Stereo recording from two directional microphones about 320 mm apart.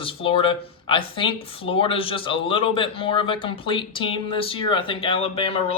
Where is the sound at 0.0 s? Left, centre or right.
Centre.